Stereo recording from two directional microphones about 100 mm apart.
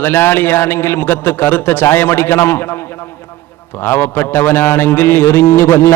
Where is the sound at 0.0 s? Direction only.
20° left (ahead or behind).